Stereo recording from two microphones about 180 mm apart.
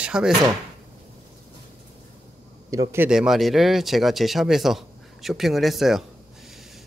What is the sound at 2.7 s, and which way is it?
Speech, 15° right (ahead or behind).